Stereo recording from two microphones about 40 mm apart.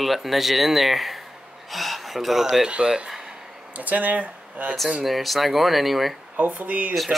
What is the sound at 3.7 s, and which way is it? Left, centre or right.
Speech, right.